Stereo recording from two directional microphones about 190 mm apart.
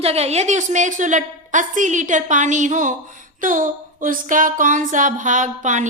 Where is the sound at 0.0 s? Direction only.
35° right (ahead or behind).